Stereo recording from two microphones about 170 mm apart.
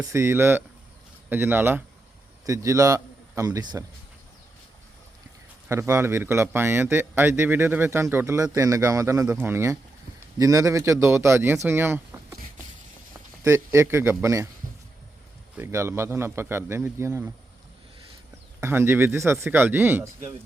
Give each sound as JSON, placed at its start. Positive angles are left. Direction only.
{"t": 0.0, "sound": "a man's voice", "side_deg": -15}
{"t": 5.6, "sound": "a man's voice", "side_deg": -15}
{"t": 15.5, "sound": "speech", "side_deg": -15}
{"t": 18.6, "sound": "speech", "side_deg": -15}